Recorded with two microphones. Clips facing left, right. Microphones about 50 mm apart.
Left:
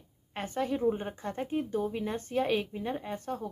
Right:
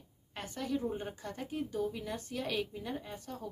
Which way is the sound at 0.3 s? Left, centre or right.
Left.